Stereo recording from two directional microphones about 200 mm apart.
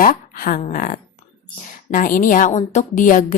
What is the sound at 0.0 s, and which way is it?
Speech, 45° left (ahead or behind).